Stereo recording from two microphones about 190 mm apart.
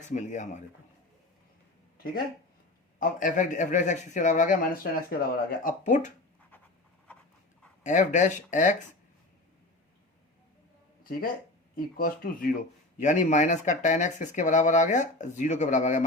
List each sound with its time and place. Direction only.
0.0 s a man's voice: 40° left (ahead or behind)
3.0 s a man's voice: 45° left (ahead or behind)
7.9 s a man's voice: 40° left (ahead or behind)
11.0 s a man's voice: 50° left (ahead or behind)